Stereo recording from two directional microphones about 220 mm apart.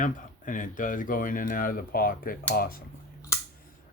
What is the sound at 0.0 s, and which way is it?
Speech, 35° left (ahead or behind).